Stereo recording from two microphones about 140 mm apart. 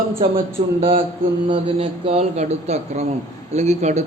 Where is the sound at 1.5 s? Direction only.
45° right (ahead or behind).